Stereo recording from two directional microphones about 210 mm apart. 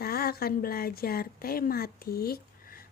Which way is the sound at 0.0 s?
45° left (ahead or behind).